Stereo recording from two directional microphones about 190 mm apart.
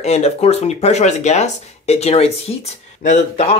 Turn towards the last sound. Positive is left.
turn(degrees=35)  # may be behind; listen again after turning